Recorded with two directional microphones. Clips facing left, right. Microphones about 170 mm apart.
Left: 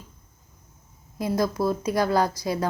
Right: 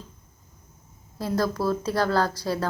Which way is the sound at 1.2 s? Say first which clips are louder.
Left 1 dB; 15° left (ahead or behind).